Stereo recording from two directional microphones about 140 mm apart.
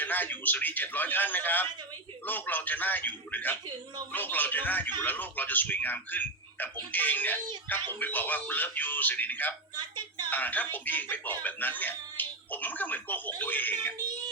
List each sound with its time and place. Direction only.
0.0 s speech: 15° left (ahead or behind)
9.7 s a sound: 30° right (ahead or behind)
10.2 s speech: 15° left (ahead or behind)